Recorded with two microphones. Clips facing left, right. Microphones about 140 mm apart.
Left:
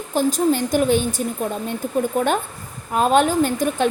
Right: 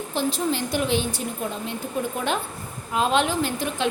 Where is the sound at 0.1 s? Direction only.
45° left (ahead or behind).